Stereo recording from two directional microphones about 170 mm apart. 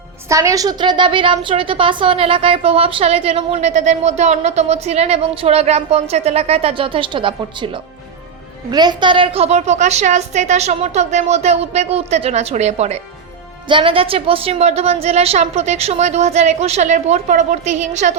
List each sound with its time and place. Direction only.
0.3 s a woman's voice: 20° right (ahead or behind); by 18.1 s 45° right (ahead or behind)